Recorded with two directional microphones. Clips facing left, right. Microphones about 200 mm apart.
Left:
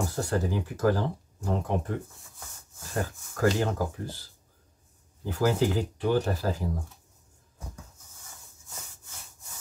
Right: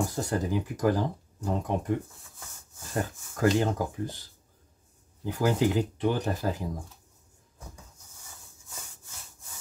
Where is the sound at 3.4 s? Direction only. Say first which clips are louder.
Right 1 dB; 20° right (ahead or behind).